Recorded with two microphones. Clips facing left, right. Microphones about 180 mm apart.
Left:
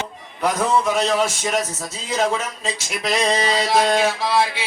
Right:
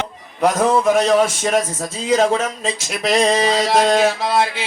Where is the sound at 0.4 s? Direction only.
50° right (ahead or behind).